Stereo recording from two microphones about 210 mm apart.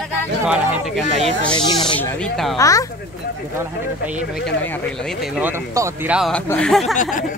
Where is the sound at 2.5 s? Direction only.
15° left (ahead or behind).